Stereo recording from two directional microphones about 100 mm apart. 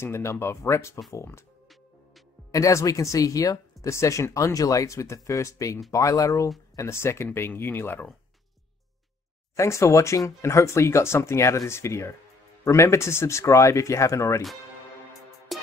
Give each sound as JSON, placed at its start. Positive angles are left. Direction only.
{"t": 0.0, "sound": "speech", "side_deg": 25}
{"t": 2.5, "sound": "speech", "side_deg": 30}
{"t": 9.6, "sound": "speech", "side_deg": 30}
{"t": 15.5, "sound": "music", "side_deg": 0}